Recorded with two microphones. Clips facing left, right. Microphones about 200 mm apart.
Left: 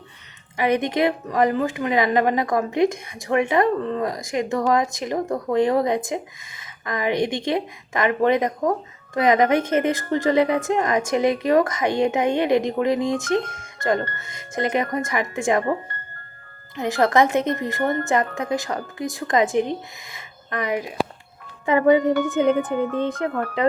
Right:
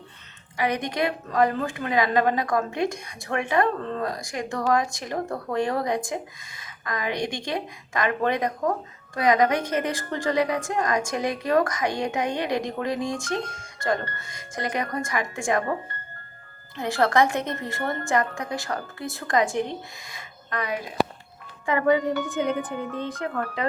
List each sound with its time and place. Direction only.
0.5 s a woman's voice: 25° left (ahead or behind)
16.7 s a woman's voice: 20° left (ahead or behind)
22.5 s speech: 50° left (ahead or behind)